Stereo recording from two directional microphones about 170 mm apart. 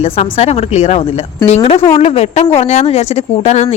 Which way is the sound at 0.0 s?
35° left (ahead or behind).